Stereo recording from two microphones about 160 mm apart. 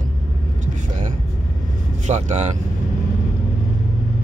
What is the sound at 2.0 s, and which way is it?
Speech, 45° right (ahead or behind).